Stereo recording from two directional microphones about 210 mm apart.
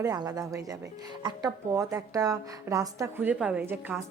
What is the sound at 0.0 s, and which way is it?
A woman's voice, 15° right (ahead or behind).